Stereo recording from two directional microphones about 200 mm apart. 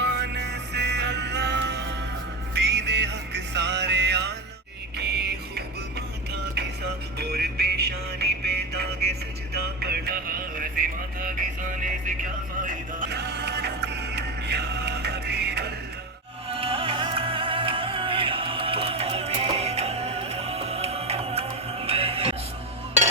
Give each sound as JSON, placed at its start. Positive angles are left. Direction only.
{"t": 0.0, "sound": "music", "side_deg": -60}
{"t": 7.2, "sound": "music", "side_deg": -55}
{"t": 12.6, "sound": "music", "side_deg": -50}
{"t": 16.5, "sound": "music", "side_deg": -30}